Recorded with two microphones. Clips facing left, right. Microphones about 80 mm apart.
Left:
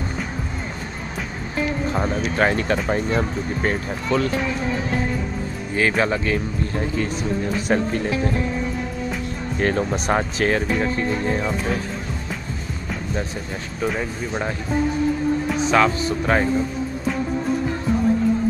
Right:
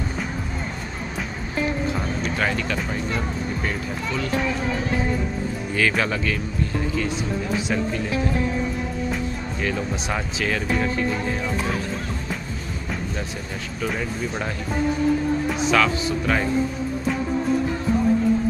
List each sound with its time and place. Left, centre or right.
2.3 s speech: left
5.8 s speech: left
7.6 s speech: left
9.6 s speech: left
13.9 s speech: centre
15.7 s speech: left